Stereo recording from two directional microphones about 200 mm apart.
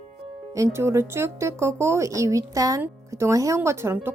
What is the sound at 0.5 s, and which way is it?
Speech, 15° right (ahead or behind).